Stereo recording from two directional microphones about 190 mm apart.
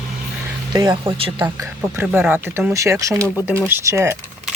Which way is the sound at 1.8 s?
10° right (ahead or behind).